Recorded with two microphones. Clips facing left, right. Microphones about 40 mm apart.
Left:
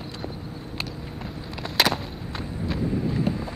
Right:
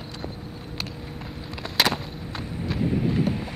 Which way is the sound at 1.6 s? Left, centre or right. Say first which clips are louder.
Left 1 dB; centre.